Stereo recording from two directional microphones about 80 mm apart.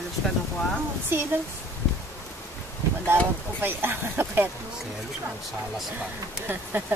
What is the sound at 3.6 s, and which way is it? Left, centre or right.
Speech, right.